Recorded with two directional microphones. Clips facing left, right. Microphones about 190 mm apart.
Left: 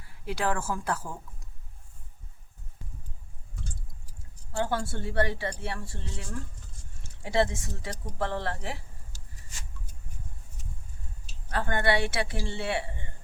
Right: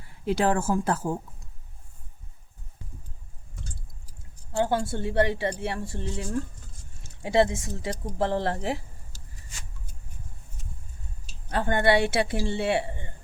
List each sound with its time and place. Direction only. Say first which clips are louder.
0.3 s speech: right 6 dB; 25° right (ahead or behind)
4.5 s speech: right 4 dB; 20° right (ahead or behind)
7.2 s speech: right 4 dB; 20° right (ahead or behind)
11.5 s speech: right 5 dB; 20° right (ahead or behind)